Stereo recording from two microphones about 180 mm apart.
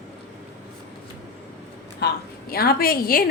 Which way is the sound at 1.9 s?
60° left (ahead or behind).